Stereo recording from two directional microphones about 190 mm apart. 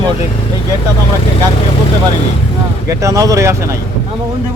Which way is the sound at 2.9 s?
15° right (ahead or behind).